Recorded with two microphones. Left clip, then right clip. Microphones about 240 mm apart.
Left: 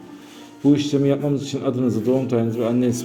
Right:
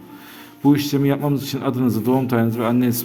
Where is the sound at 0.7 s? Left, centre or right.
Right.